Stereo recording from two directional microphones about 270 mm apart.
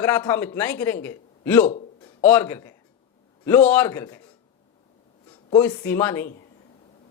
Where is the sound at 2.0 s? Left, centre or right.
Centre.